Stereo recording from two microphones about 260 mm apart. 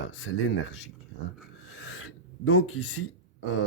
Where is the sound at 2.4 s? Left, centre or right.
Left.